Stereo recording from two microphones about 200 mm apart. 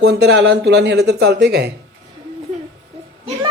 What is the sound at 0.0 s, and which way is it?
A man's voice, 55° right (ahead or behind).